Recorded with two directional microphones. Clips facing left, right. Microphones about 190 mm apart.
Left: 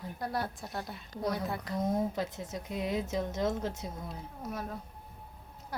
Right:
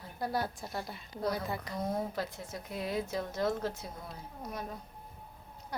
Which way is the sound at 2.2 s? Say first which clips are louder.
Left 2 dB; 20° left (ahead or behind).